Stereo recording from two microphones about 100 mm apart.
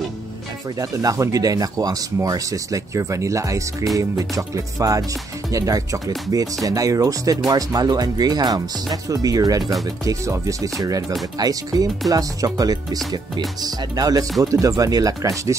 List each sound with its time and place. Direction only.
0.7 s speech: 30° right (ahead or behind)